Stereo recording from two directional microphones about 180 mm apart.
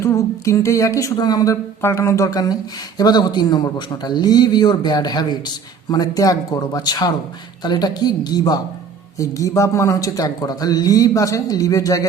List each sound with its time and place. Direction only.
0.0 s a woman's voice: 15° left (ahead or behind)